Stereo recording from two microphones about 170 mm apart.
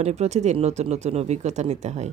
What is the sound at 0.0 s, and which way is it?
A woman's voice, 40° right (ahead or behind).